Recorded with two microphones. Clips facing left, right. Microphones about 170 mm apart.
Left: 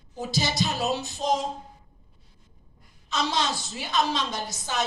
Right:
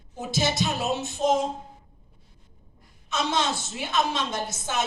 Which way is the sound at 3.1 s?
55° right (ahead or behind).